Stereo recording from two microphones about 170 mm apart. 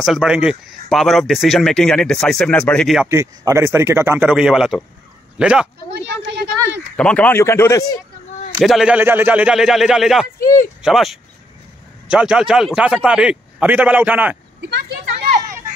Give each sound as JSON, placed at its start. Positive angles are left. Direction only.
{"t": 0.0, "sound": "speech", "side_deg": -5}
{"t": 3.1, "sound": "a man's voice", "side_deg": -15}
{"t": 6.0, "sound": "a woman's voice", "side_deg": -75}
{"t": 7.0, "sound": "speech", "side_deg": 5}
{"t": 8.5, "sound": "speech", "side_deg": 0}
{"t": 10.4, "sound": "speech", "side_deg": 50}
{"t": 10.8, "sound": "speech", "side_deg": 0}
{"t": 14.6, "sound": "a sound", "side_deg": -85}